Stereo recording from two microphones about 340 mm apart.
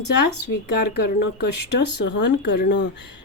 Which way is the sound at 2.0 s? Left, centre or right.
Left.